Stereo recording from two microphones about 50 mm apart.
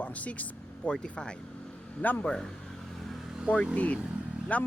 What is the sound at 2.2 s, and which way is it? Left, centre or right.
Speech, centre.